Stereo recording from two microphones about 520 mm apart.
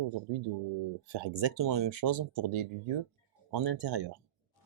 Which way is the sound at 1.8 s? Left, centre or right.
Right.